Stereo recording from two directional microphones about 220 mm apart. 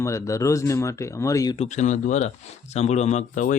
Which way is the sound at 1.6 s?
35° left (ahead or behind).